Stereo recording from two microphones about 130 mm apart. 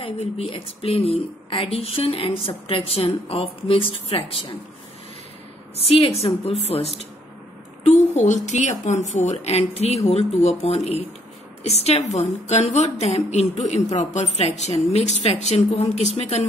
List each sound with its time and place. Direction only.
0.0 s a woman's voice: 45° left (ahead or behind)
5.9 s a woman's voice: 45° left (ahead or behind)